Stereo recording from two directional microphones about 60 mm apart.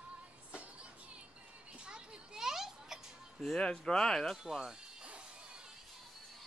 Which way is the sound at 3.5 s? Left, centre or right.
Centre.